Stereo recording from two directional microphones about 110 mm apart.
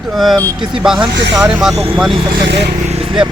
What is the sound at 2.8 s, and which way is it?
Vehicle, 70° right (ahead or behind).